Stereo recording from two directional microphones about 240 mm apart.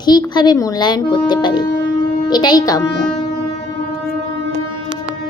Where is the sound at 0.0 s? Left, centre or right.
Centre.